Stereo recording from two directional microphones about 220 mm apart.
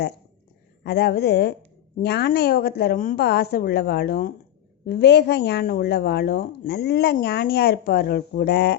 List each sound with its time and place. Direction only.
0.9 s a woman's voice: 45° left (ahead or behind)